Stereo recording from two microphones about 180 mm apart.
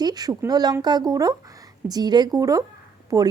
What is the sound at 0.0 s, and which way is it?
Speech, 20° right (ahead or behind).